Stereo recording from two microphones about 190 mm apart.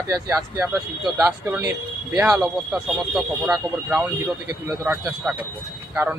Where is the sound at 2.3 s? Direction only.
5° right (ahead or behind).